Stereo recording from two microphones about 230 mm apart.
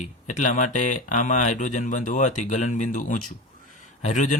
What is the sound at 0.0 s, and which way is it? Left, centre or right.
Speech, left.